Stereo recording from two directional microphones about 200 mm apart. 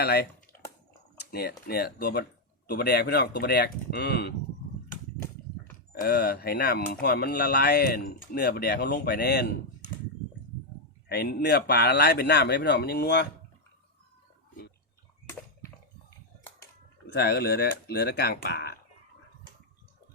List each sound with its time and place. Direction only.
0.0 s speech: 55° left (ahead or behind)
5.9 s speech: 50° left (ahead or behind)
11.1 s speech: 50° left (ahead or behind)
17.1 s speech: 55° left (ahead or behind)